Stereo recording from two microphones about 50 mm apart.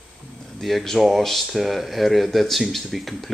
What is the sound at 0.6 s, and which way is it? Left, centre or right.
Speech, centre.